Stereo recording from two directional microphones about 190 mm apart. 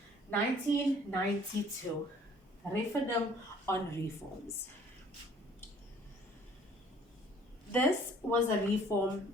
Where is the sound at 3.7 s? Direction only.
15° left (ahead or behind).